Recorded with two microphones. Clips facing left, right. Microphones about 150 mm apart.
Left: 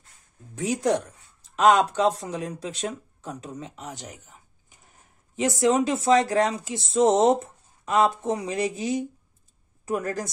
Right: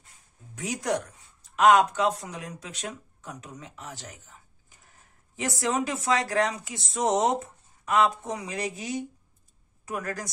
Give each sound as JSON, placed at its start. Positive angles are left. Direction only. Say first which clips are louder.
{"t": 0.6, "sound": "speech", "louder": "left 5 dB", "side_deg": 25}